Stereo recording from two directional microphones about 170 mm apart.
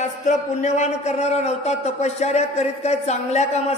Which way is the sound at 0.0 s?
45° left (ahead or behind).